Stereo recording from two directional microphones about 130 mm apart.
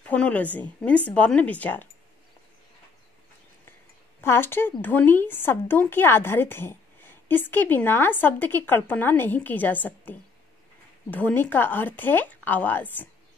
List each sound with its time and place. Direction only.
0.0 s a woman's voice: 10° left (ahead or behind)
4.2 s a woman's voice: 15° left (ahead or behind)